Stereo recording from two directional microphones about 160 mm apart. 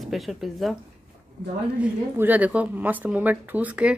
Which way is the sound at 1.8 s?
10° right (ahead or behind).